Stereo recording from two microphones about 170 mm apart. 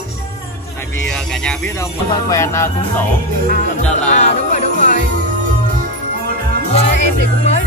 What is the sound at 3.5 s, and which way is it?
Speech, 45° left (ahead or behind).